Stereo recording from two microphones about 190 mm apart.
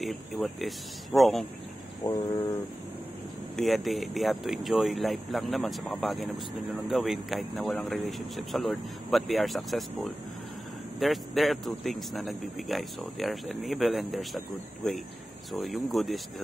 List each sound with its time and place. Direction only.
0.0 s speech: centre (ahead or behind)
2.0 s speech: 25° left (ahead or behind)
3.5 s speech: centre (ahead or behind)